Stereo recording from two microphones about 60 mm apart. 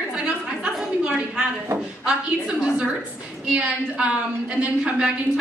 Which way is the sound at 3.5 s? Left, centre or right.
Right.